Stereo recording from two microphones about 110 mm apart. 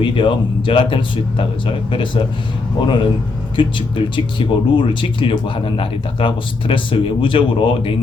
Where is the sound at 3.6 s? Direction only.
50° left (ahead or behind).